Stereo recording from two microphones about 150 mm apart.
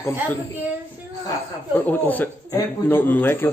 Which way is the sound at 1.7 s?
10° left (ahead or behind).